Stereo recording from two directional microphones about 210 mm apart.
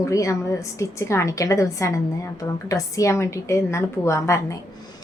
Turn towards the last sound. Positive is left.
turn(degrees=15)  # may be behind; listen again after turning